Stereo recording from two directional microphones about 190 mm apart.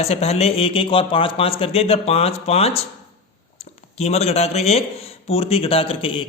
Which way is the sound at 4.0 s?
35° left (ahead or behind).